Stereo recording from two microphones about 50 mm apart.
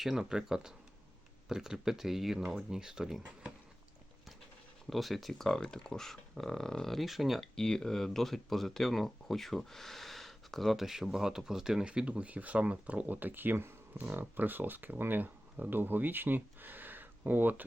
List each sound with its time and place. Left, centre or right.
0.0 s speech: centre
4.9 s speech: centre
7.5 s speech: centre; by 17.7 s right